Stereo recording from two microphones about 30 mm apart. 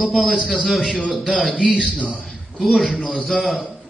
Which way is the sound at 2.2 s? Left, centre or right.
Centre.